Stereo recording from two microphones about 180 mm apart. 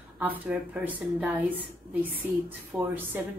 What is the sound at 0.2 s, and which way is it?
Speech, 10° right (ahead or behind).